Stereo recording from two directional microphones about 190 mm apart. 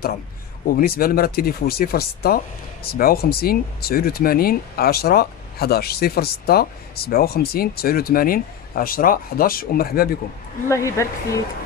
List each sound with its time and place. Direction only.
0.7 s speech: 50° left (ahead or behind)
10.7 s a woman's voice: 15° left (ahead or behind)